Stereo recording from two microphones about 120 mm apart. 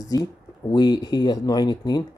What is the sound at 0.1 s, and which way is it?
Speech, 30° left (ahead or behind).